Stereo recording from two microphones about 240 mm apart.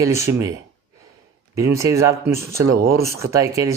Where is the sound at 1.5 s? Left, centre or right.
Centre.